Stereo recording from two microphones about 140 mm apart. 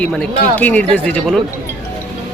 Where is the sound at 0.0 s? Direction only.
5° left (ahead or behind).